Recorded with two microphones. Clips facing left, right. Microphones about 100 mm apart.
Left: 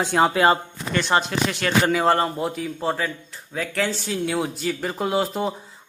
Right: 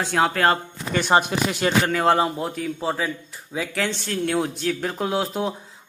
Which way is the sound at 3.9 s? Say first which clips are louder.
Even; 5° left (ahead or behind).